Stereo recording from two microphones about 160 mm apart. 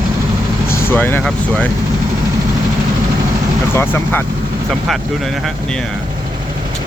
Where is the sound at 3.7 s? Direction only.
15° left (ahead or behind).